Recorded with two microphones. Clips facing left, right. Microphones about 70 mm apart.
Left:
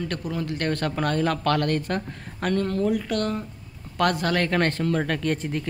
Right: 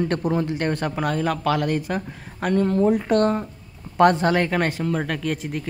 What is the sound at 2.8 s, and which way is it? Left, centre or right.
A man's voice, right.